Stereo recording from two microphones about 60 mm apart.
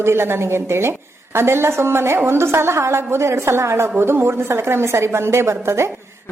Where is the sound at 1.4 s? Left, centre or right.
Right.